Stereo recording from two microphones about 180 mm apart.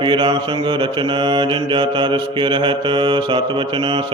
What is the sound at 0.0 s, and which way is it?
Mantra, 25° right (ahead or behind).